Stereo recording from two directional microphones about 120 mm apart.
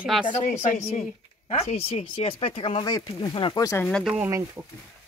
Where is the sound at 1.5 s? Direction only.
65° left (ahead or behind).